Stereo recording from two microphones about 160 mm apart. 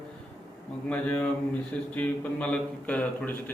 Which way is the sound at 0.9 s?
10° left (ahead or behind).